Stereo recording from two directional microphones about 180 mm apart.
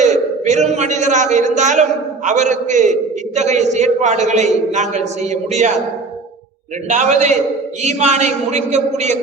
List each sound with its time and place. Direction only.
0.0 s a man's voice: 40° right (ahead or behind)
6.8 s a man's voice: 40° right (ahead or behind)